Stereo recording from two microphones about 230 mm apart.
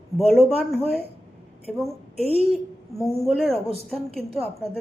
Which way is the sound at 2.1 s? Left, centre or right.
Right.